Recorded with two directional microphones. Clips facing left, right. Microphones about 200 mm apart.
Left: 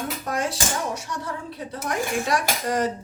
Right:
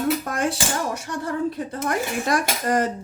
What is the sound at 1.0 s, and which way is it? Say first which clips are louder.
A woman's voice: right 7 dB; 55° right (ahead or behind).